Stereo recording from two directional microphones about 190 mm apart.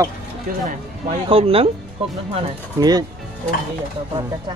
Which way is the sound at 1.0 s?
30° right (ahead or behind).